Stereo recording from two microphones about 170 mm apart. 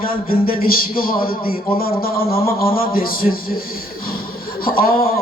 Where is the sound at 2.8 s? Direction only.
60° left (ahead or behind).